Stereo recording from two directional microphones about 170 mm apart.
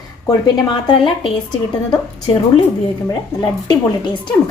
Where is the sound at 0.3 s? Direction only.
25° left (ahead or behind).